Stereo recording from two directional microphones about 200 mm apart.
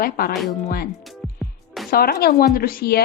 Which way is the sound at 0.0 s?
50° left (ahead or behind).